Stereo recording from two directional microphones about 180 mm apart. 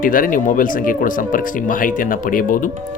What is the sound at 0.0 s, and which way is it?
Speech, 50° left (ahead or behind).